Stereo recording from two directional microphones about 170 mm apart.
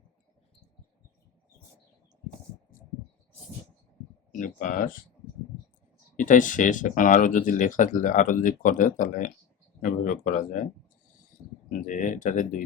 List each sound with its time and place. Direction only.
4.3 s speech: 50° left (ahead or behind)
6.1 s speech: 50° left (ahead or behind)
11.7 s speech: 50° left (ahead or behind)